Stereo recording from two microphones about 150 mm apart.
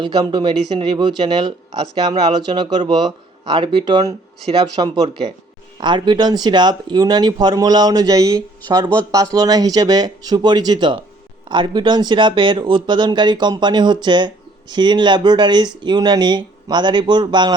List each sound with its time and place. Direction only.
0.0 s speech: 30° right (ahead or behind)